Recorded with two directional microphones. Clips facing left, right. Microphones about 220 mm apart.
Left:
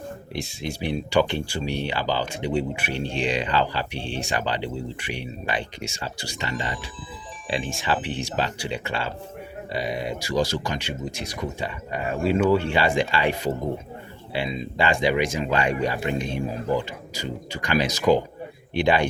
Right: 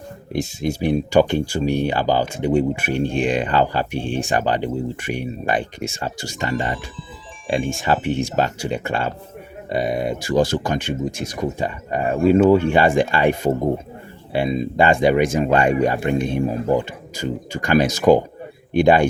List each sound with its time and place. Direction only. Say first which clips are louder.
0.3 s speech: right 9 dB; 45° right (ahead or behind)